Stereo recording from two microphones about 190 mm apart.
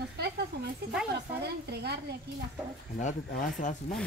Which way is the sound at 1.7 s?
60° right (ahead or behind).